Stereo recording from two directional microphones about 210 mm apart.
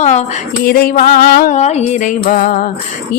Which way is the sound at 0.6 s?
45° left (ahead or behind).